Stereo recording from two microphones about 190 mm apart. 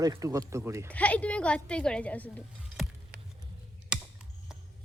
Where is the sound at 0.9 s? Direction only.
5° left (ahead or behind).